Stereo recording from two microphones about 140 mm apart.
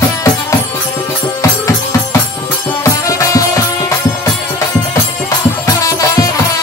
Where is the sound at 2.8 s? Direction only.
25° left (ahead or behind).